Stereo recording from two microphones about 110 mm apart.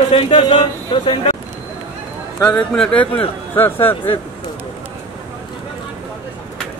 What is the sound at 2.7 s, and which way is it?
A man's voice, 10° left (ahead or behind).